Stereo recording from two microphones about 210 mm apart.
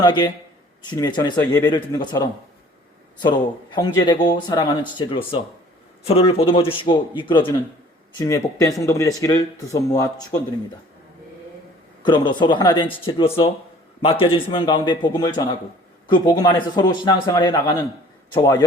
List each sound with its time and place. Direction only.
0.0 s a man's voice: 20° left (ahead or behind)
12.0 s a man's voice: 20° left (ahead or behind)